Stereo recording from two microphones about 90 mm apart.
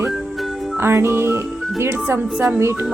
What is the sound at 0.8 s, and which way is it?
Speech, 30° right (ahead or behind).